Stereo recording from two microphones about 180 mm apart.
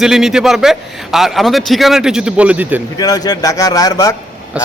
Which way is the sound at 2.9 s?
20° left (ahead or behind).